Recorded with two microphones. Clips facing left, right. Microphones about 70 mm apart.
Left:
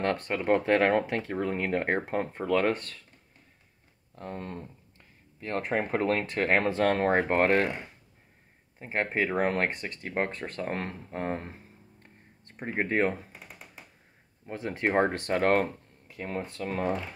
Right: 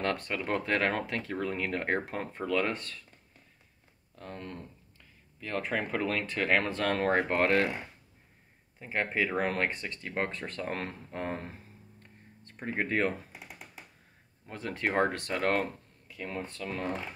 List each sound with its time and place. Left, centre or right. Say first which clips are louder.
0.0 s speech: left 4 dB; left
4.1 s a sound: left 4 dB; left
5.6 s speech: left 3 dB; left
8.7 s speech: left 2 dB; left
12.5 s speech: left 3 dB; left
14.4 s speech: left 3 dB; left